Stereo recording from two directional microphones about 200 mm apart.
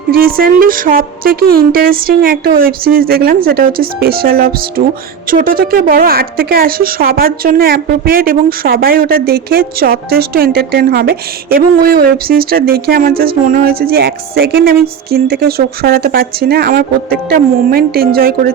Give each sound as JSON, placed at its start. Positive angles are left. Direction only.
{"t": 0.1, "sound": "a woman's voice", "side_deg": -50}